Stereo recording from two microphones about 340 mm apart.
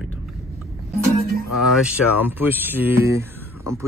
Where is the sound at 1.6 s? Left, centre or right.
Centre.